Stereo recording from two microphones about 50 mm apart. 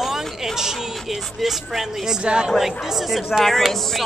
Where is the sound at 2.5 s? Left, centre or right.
Centre.